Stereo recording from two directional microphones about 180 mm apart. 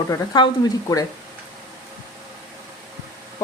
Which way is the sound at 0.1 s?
20° left (ahead or behind).